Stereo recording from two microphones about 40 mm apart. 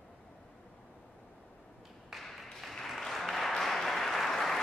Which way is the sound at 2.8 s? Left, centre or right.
Centre.